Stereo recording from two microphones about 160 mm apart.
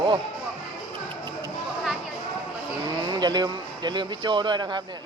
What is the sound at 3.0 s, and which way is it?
Speech, 25° right (ahead or behind).